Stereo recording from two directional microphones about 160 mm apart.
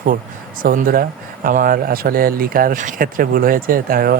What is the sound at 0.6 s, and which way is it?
Speech, 60° right (ahead or behind).